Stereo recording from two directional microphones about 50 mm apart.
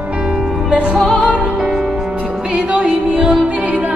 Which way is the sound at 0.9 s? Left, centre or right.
Centre.